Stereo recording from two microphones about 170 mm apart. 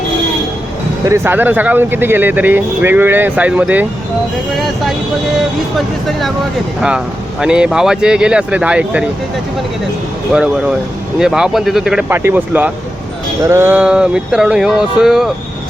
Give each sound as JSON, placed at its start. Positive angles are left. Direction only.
{"t": 1.0, "sound": "speech", "side_deg": -15}
{"t": 5.7, "sound": "speech", "side_deg": 0}
{"t": 10.3, "sound": "speech", "side_deg": -5}